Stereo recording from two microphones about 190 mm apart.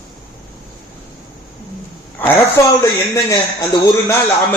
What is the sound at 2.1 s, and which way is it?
A man's voice, 10° left (ahead or behind).